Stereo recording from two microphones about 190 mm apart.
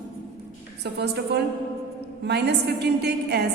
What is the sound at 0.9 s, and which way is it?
A woman's voice, 60° right (ahead or behind).